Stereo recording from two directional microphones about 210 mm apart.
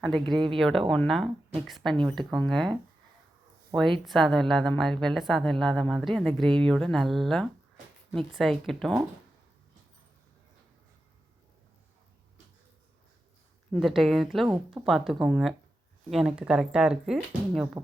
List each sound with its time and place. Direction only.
0.3 s speech: 20° right (ahead or behind)
0.5 s a woman's voice: centre (ahead or behind)
4.0 s a woman's voice: centre (ahead or behind)
13.7 s a woman's voice: centre (ahead or behind)